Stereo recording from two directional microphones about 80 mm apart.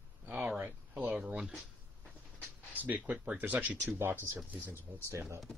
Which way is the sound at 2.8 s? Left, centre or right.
Right.